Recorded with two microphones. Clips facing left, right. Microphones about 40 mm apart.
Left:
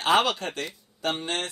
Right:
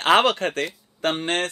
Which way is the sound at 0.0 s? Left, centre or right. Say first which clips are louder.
Right 5 dB; right.